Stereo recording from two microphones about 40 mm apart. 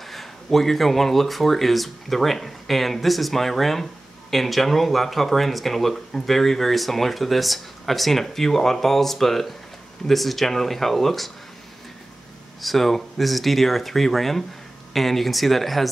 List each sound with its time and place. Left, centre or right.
0.0 s speech: centre
12.6 s speech: centre